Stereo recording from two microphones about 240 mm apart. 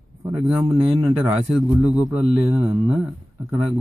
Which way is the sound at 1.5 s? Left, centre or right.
Centre.